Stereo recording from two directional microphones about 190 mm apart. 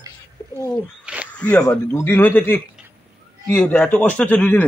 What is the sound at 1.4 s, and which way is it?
A man's voice, 5° left (ahead or behind).